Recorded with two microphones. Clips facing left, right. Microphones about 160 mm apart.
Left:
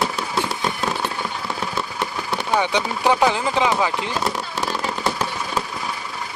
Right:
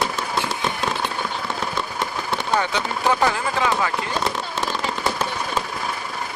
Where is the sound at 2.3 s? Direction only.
10° left (ahead or behind).